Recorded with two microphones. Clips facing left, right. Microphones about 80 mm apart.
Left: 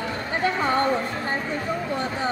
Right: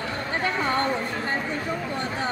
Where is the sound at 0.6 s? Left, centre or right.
Centre.